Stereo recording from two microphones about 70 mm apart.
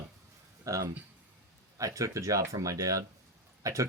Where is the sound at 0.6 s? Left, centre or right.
Right.